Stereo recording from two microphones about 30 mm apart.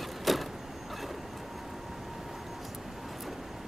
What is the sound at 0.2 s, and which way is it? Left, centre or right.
Vehicle, centre.